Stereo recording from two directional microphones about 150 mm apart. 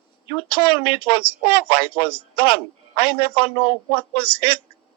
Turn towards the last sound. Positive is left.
turn(degrees=35)  # may be behind; listen again after turning